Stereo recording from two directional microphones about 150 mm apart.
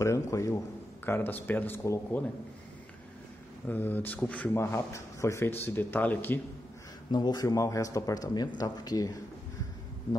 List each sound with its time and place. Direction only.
0.0 s a man's voice: 20° left (ahead or behind)
3.6 s speech: 10° left (ahead or behind)
7.1 s a man's voice: 30° left (ahead or behind)